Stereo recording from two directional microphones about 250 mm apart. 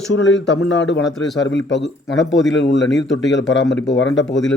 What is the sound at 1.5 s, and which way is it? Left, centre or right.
A man's voice, left.